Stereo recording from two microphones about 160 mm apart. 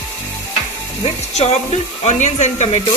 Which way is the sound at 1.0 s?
40° left (ahead or behind).